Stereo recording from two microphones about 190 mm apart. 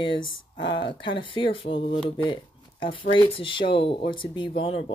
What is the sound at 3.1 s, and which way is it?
Speech, 25° left (ahead or behind).